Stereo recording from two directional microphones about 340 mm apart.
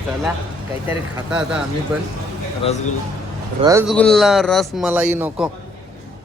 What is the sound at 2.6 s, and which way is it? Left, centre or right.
Speech, centre.